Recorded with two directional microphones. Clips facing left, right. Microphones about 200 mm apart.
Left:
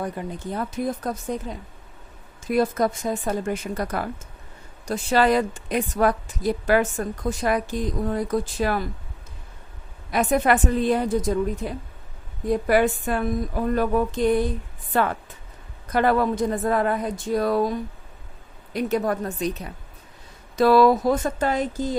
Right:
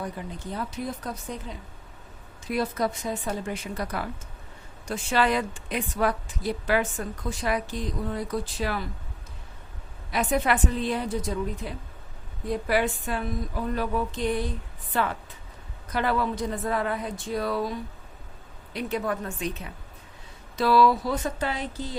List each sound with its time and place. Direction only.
0.0 s a woman's voice: 50° left (ahead or behind)
10.1 s a woman's voice: 45° left (ahead or behind)